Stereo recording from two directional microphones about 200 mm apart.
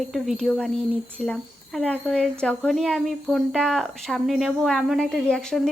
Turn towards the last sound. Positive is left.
turn(degrees=5)  # may be behind; listen again after turning